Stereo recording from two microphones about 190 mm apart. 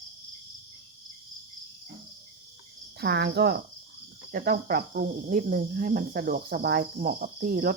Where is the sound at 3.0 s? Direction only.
60° right (ahead or behind).